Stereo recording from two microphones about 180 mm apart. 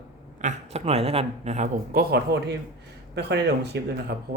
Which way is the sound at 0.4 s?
40° right (ahead or behind).